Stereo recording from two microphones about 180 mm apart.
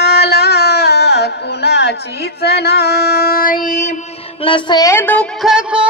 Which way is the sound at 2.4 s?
65° left (ahead or behind).